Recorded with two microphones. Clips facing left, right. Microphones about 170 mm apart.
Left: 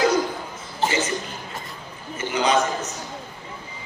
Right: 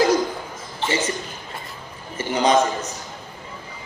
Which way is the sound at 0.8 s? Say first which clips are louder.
Left 1 dB; 40° left (ahead or behind).